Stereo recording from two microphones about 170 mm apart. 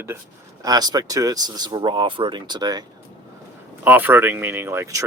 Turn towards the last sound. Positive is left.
turn(degrees=-15)  # may be behind; listen again after turning